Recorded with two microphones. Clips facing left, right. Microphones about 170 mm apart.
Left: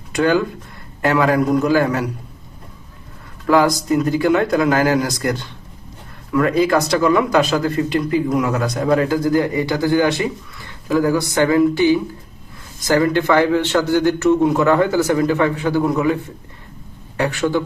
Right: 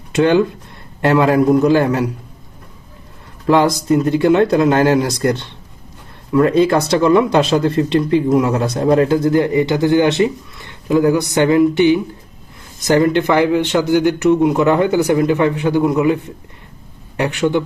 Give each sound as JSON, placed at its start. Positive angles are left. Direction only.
{"t": 0.1, "sound": "speech", "side_deg": -25}
{"t": 3.4, "sound": "a man's voice", "side_deg": -25}
{"t": 17.2, "sound": "speech", "side_deg": -20}